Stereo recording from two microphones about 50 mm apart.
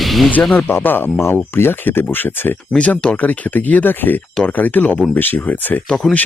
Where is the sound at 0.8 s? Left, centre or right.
Left.